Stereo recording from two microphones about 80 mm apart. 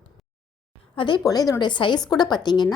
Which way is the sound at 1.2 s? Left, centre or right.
Left.